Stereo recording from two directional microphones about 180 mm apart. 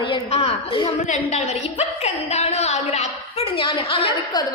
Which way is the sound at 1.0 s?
40° left (ahead or behind).